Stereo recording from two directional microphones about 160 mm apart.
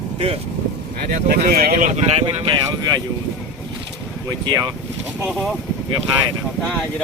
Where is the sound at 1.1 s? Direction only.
65° right (ahead or behind).